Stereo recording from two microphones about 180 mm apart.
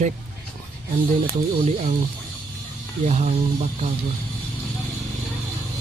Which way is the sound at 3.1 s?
40° right (ahead or behind).